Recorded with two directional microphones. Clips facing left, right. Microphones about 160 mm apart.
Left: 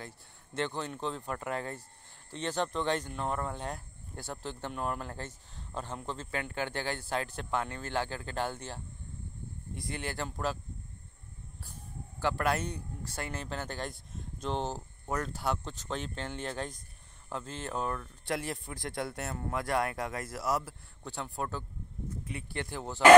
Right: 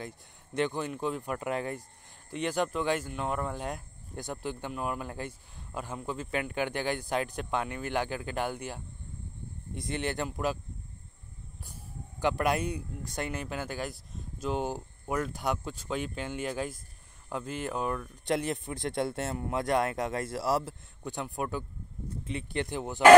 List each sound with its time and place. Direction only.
0.6 s speech: 10° right (ahead or behind)
12.2 s speech: 20° right (ahead or behind)
21.0 s speech: 15° right (ahead or behind)